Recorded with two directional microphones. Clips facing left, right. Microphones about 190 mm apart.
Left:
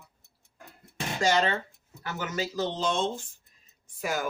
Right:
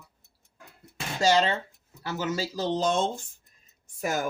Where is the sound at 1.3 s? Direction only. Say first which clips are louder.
Right 3 dB; 30° right (ahead or behind); by 4.2 s 45° right (ahead or behind).